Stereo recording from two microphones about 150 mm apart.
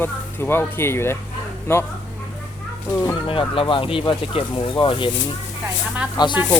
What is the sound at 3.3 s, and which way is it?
Speech, 35° left (ahead or behind).